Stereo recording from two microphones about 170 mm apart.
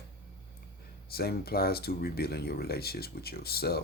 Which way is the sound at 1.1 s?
65° left (ahead or behind).